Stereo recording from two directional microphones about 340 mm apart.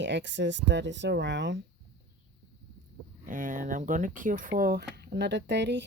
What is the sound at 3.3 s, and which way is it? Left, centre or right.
Speech, right.